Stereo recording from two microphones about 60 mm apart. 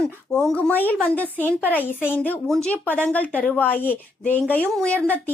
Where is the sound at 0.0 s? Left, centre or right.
Centre.